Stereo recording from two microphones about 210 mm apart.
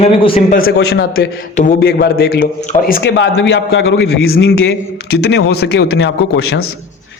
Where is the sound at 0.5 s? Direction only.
45° left (ahead or behind).